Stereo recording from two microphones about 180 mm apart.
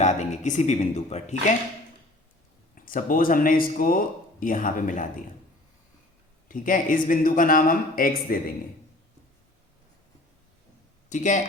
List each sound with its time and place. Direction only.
0.0 s speech: 40° left (ahead or behind)
2.7 s speech: 50° left (ahead or behind)
6.5 s speech: 50° left (ahead or behind)
11.1 s speech: 45° left (ahead or behind)